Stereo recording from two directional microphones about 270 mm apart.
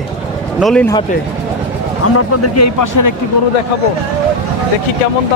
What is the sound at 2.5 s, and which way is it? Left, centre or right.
Speech, left.